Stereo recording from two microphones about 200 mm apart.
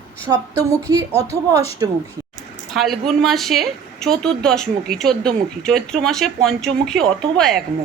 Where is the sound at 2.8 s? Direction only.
Centre (ahead or behind).